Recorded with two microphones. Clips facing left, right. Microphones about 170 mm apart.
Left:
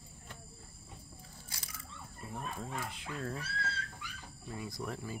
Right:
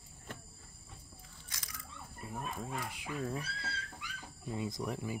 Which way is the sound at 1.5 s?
30° left (ahead or behind).